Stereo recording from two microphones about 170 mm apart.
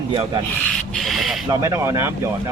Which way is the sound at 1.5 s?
15° right (ahead or behind).